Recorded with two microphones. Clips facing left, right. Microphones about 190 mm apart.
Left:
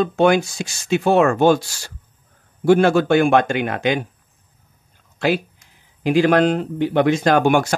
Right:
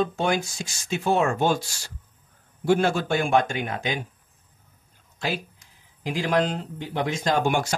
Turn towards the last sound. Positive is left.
turn(degrees=65)  # may be behind; listen again after turning